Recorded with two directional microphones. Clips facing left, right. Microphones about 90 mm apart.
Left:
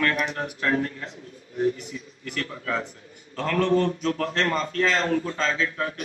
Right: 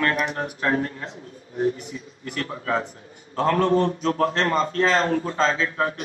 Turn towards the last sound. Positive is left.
turn(degrees=-35)  # may be behind; listen again after turning